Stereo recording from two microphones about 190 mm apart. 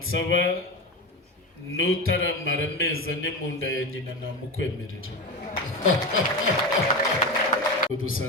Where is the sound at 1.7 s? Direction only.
90° left.